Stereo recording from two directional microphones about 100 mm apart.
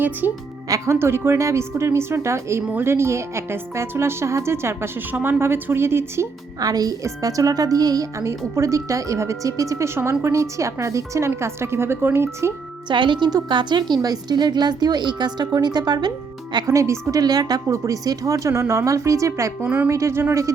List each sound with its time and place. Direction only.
0.2 s a woman's voice: 20° right (ahead or behind)
6.6 s a woman's voice: 40° right (ahead or behind)
12.9 s a woman's voice: 55° right (ahead or behind)
16.7 s a woman's voice: 30° right (ahead or behind)
19.6 s a woman's voice: 15° right (ahead or behind)
19.9 s speech: 30° right (ahead or behind)